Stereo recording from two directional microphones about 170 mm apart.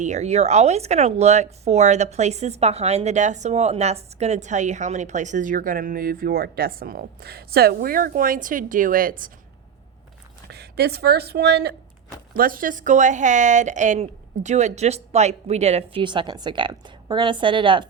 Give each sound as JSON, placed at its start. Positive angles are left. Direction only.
{"t": 0.0, "sound": "speech", "side_deg": -40}
{"t": 10.5, "sound": "speech", "side_deg": -70}
{"t": 12.3, "sound": "a woman's voice", "side_deg": -55}